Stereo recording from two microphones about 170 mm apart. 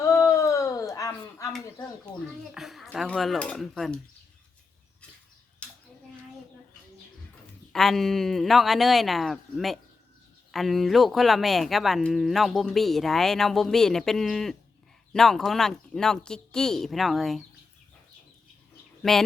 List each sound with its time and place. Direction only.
0.1 s a sound: 20° left (ahead or behind)
2.1 s speech: 15° right (ahead or behind)
2.6 s speech: centre (ahead or behind)
7.7 s speech: centre (ahead or behind)
19.0 s speech: centre (ahead or behind)